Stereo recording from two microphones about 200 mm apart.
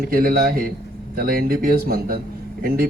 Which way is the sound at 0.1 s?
45° right (ahead or behind).